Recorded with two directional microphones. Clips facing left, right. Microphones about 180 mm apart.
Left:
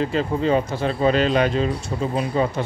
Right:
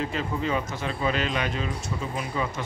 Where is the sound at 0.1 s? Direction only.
35° left (ahead or behind).